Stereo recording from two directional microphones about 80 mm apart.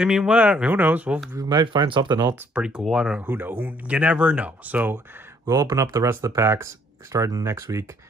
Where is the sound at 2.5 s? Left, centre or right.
Centre.